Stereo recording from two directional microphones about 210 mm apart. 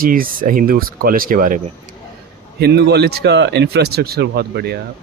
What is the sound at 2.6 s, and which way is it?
Speech, 50° right (ahead or behind).